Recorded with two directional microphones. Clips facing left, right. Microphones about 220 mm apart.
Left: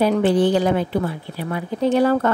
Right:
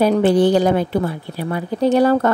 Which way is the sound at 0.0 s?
40° right (ahead or behind).